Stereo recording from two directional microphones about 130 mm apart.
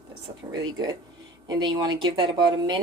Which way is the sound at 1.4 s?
35° right (ahead or behind).